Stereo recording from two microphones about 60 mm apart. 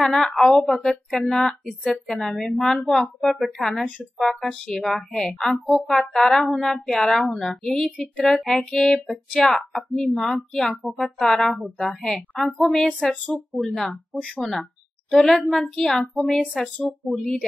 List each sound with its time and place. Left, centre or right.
0.0 s a woman's voice: centre